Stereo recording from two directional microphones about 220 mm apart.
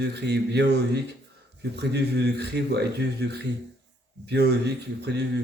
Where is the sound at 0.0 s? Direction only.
50° right (ahead or behind).